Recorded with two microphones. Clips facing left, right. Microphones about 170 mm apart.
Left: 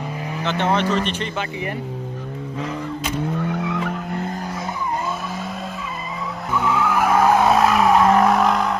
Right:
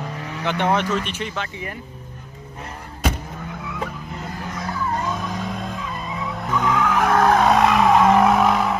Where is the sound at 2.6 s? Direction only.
90° left.